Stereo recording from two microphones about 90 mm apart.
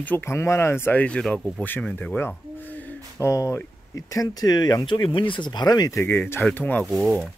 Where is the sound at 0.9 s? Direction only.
10° left (ahead or behind).